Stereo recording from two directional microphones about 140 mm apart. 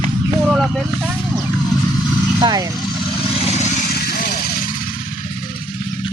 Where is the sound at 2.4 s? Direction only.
30° right (ahead or behind).